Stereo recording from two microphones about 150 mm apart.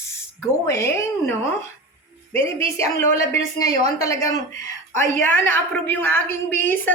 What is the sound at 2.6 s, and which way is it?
Speech, 40° right (ahead or behind).